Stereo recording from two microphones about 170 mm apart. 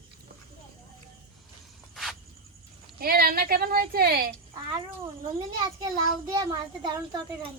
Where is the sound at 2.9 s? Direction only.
60° right (ahead or behind).